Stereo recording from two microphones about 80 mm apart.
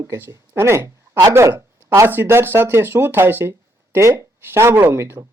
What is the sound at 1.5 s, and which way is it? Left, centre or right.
A man's voice, right.